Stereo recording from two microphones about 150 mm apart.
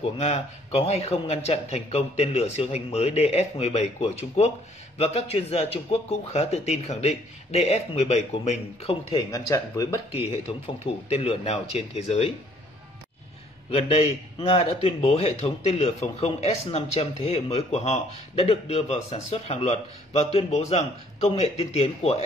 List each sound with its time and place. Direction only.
0.2 s a man's voice: 45° left (ahead or behind)
9.1 s speech: 20° left (ahead or behind)
10.8 s a man's voice: 40° left (ahead or behind)
13.7 s a man's voice: 40° left (ahead or behind)